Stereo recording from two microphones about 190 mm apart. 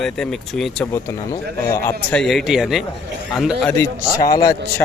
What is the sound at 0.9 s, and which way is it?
Speech, 15° left (ahead or behind).